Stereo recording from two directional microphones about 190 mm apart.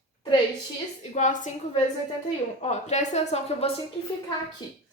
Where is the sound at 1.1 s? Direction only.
40° left (ahead or behind).